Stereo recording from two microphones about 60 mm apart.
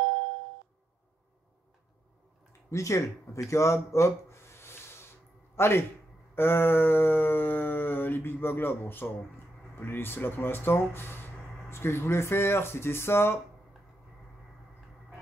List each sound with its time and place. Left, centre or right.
2.7 s speech: left
6.3 s a sound: left
11.7 s speech: left